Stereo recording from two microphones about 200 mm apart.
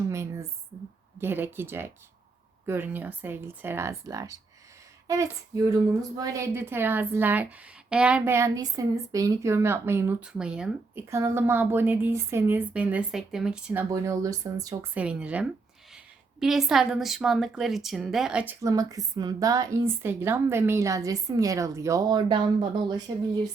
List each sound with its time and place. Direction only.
0.1 s a sound: 15° right (ahead or behind)
1.2 s a woman's voice: 10° right (ahead or behind)
13.9 s a woman's voice: 15° right (ahead or behind)
14.9 s a woman's voice: 5° right (ahead or behind)
18.6 s a woman's voice: 15° right (ahead or behind)